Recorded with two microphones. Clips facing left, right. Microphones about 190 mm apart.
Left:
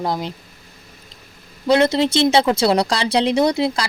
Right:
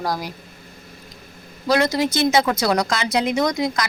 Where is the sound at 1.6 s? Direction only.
25° left (ahead or behind).